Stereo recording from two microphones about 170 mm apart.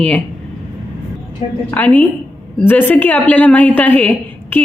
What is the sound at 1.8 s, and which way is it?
A woman's voice, 10° left (ahead or behind).